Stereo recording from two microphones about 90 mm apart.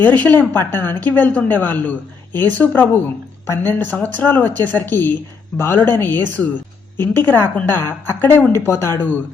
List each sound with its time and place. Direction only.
0.0 s speech: 20° left (ahead or behind)